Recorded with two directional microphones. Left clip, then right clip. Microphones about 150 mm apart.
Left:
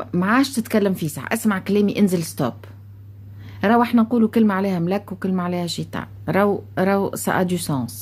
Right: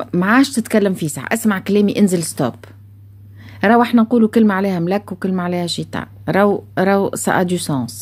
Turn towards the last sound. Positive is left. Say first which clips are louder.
# right 4 dB
turn(degrees=-30)  # may be behind; listen again after turning